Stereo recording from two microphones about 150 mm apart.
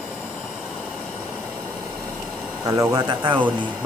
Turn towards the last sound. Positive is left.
turn(degrees=-25)  # may be behind; listen again after turning